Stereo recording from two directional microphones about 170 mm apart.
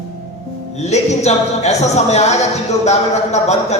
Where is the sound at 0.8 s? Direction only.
40° left (ahead or behind).